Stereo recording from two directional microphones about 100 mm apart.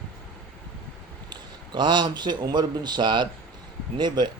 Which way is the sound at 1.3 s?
50° right (ahead or behind).